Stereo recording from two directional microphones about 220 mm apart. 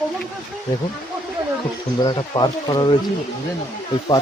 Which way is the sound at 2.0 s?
20° left (ahead or behind).